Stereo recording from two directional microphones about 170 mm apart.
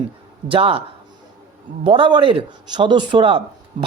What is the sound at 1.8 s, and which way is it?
Speech, 30° right (ahead or behind).